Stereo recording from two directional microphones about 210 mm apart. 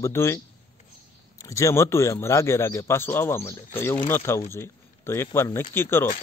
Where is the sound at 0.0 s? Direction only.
15° left (ahead or behind).